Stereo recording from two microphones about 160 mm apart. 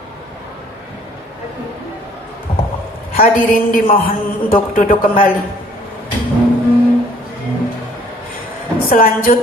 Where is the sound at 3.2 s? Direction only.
60° left (ahead or behind).